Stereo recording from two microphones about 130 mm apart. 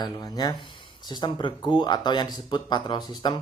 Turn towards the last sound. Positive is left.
turn(degrees=35)  # may be behind; listen again after turning